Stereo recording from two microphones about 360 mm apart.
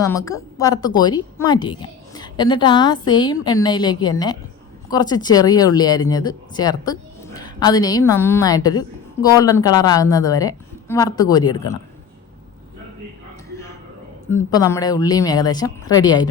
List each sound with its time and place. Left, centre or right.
0.0 s a woman's voice: centre
14.5 s a woman's voice: centre